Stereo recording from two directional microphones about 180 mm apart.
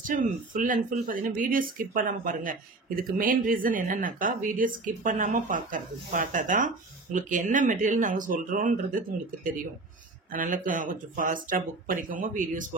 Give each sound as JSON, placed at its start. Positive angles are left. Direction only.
{"t": 0.0, "sound": "speech", "side_deg": -45}